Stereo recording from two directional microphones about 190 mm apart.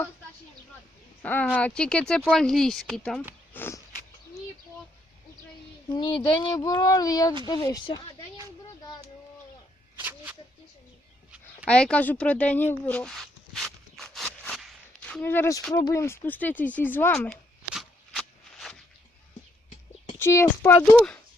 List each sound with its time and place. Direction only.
1.2 s speech: 10° left (ahead or behind)
3.5 s walk: 10° left (ahead or behind)
6.0 s speech: 25° left (ahead or behind)
10.0 s a sound: 10° right (ahead or behind)
11.6 s a sound: 5° left (ahead or behind)
15.7 s speech: 15° left (ahead or behind)
17.7 s shuffling cards: centre (ahead or behind)
20.1 s speech: 15° left (ahead or behind)